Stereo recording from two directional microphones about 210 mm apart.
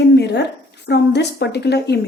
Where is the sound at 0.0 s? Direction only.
55° left (ahead or behind).